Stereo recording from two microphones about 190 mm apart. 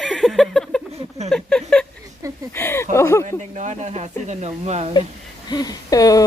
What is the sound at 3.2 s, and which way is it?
Speech, 40° right (ahead or behind).